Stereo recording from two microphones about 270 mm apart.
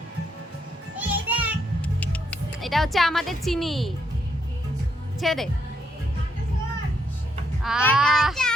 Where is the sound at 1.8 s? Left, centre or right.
Centre.